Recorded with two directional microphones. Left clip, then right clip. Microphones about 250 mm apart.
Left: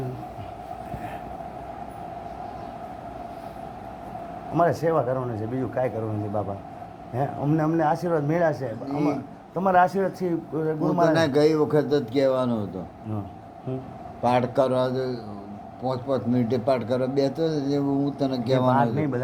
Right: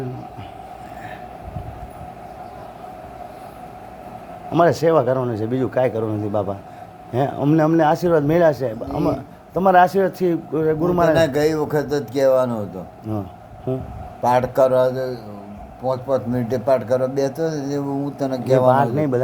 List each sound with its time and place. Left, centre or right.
4.5 s speech: right
11.2 s speech: right
13.7 s speech: right
14.2 s speech: right
18.9 s speech: right